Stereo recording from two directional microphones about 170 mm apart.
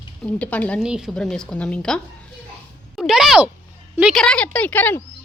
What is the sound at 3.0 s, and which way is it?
A woman's voice, centre (ahead or behind).